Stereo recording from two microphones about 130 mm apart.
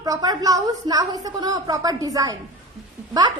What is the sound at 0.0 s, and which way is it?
A woman's voice, 30° right (ahead or behind).